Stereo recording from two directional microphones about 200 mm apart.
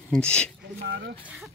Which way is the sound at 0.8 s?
55° right (ahead or behind).